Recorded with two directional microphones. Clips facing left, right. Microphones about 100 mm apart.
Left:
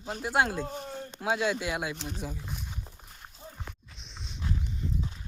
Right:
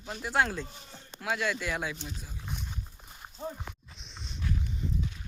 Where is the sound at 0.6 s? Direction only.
50° left (ahead or behind).